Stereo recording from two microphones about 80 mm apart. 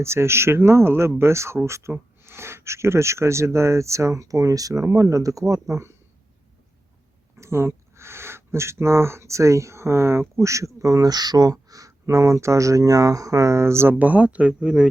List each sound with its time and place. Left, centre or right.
0.0 s speech: right
7.3 s speech: right
13.9 s speech: centre